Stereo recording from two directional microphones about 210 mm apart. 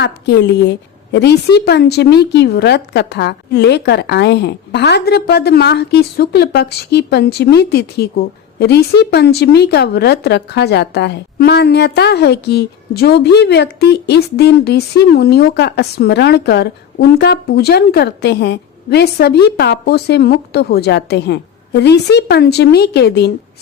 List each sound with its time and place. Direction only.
0.0 s a woman's voice: 55° left (ahead or behind)